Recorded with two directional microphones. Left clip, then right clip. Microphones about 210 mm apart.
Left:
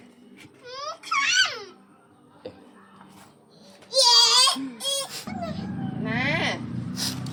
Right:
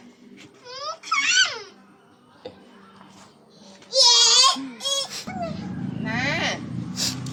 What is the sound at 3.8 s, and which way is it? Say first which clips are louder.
Baby cry: right 1 dB; 15° left (ahead or behind).